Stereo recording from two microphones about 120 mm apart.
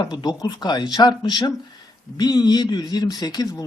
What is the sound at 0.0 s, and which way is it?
A man's voice, 35° left (ahead or behind).